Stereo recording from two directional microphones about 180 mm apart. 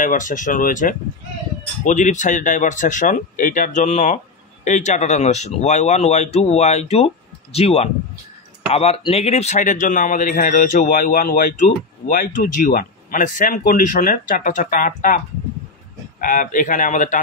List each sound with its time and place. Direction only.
0.0 s a man's voice: 45° left (ahead or behind)